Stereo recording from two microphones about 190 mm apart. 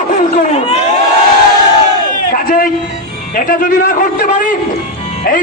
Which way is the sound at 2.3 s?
45° left (ahead or behind).